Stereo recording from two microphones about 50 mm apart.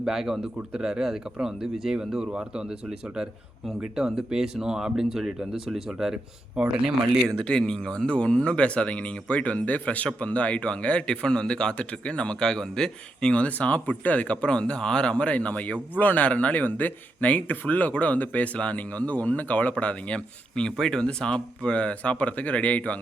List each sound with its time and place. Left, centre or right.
0.0 s speech: centre
3.9 s speech: centre
7.3 s speech: centre
13.3 s speech: left